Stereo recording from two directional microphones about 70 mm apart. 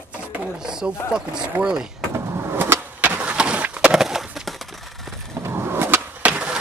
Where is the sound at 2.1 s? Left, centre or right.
Right.